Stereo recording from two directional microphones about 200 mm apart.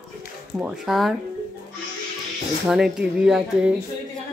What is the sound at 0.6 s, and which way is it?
Speech, centre (ahead or behind).